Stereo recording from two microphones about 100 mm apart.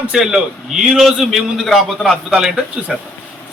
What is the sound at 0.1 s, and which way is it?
A man's voice, 5° right (ahead or behind).